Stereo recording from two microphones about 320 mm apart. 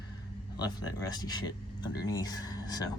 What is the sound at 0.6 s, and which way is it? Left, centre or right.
Speech, centre.